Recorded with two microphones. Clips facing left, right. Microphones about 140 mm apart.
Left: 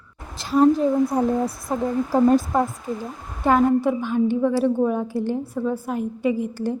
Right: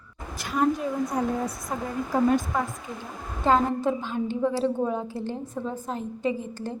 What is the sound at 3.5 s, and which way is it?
A woman's voice, 10° left (ahead or behind).